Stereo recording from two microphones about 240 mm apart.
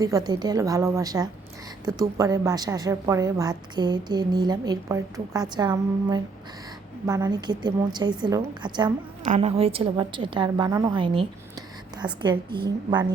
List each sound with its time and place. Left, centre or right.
0.3 s a woman's voice: centre